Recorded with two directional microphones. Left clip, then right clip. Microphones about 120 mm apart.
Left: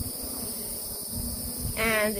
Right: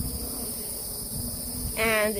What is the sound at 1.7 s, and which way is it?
Speech, 45° right (ahead or behind).